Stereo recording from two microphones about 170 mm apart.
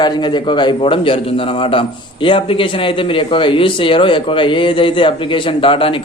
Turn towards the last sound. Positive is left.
turn(degrees=30)  # may be behind; listen again after turning